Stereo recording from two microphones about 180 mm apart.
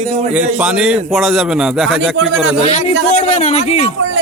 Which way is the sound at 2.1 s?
90° right.